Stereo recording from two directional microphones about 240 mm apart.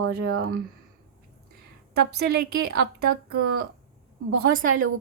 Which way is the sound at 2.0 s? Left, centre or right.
Right.